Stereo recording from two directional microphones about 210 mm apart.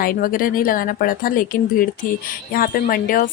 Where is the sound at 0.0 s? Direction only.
40° left (ahead or behind).